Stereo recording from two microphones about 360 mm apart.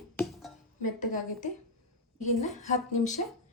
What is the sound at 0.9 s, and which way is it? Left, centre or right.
Speech, left.